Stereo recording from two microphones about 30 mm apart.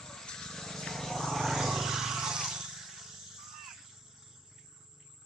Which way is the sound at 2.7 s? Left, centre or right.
Centre.